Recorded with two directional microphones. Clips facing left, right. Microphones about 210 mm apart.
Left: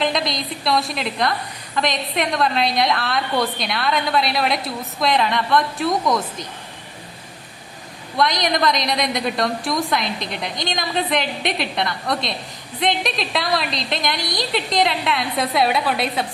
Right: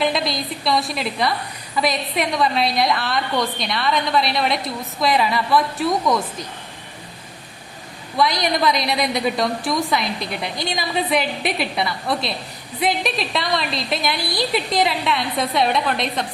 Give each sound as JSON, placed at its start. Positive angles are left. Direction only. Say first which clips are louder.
{"t": 0.0, "sound": "a woman's voice", "louder": "right 1 dB", "side_deg": -5}
{"t": 8.1, "sound": "a woman's voice", "louder": "even", "side_deg": 0}